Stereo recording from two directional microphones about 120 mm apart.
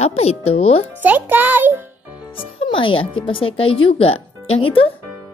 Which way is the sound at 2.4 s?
45° left (ahead or behind).